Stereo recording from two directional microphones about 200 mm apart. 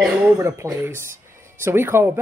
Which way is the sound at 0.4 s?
15° right (ahead or behind).